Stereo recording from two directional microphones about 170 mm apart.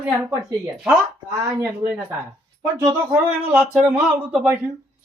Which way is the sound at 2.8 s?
15° right (ahead or behind).